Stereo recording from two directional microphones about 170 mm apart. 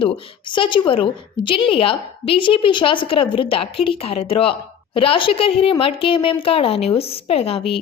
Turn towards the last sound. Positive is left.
turn(degrees=35)  # may be behind; listen again after turning